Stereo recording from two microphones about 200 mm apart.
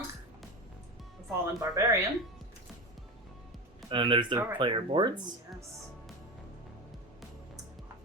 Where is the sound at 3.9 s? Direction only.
25° right (ahead or behind).